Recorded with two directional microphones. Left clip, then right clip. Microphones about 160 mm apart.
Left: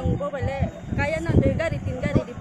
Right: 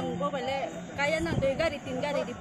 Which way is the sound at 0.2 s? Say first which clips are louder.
Left 2 dB; 10° left (ahead or behind).